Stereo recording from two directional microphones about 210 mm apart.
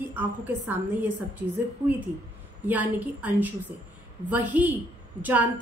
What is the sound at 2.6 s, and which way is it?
Speech, 10° right (ahead or behind).